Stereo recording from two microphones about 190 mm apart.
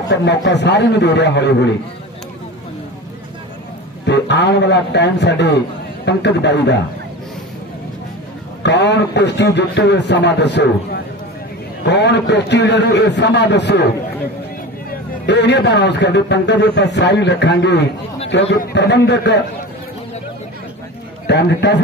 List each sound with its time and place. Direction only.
0.1 s a man's voice: 65° left (ahead or behind)
4.0 s a man's voice: 65° left (ahead or behind)
8.6 s a man's voice: 65° left (ahead or behind)
11.8 s a man's voice: 65° left (ahead or behind)
14.9 s a man's voice: 65° left (ahead or behind)
21.3 s a man's voice: 65° left (ahead or behind)